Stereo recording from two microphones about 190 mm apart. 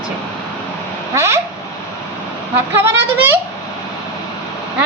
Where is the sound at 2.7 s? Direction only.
15° right (ahead or behind).